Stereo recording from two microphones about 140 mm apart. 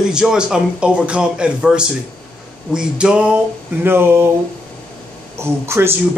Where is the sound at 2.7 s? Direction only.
5° right (ahead or behind).